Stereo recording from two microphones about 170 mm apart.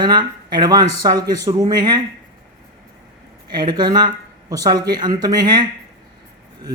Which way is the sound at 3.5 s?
25° right (ahead or behind).